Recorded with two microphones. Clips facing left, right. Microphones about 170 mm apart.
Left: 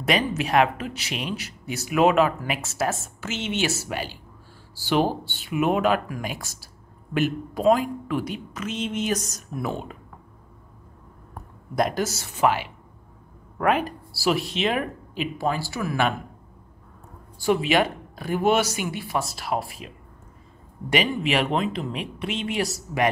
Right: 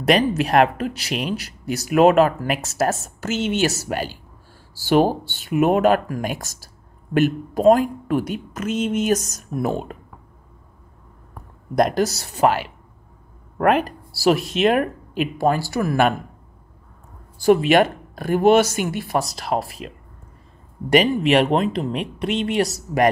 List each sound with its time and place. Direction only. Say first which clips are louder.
0.0 s speech: right 6 dB; 35° right (ahead or behind)
11.7 s speech: right 5 dB; 40° right (ahead or behind)
13.6 s speech: right 4 dB; 55° right (ahead or behind)
17.4 s speech: right 6 dB; 50° right (ahead or behind)
20.9 s speech: right 7 dB; 40° right (ahead or behind)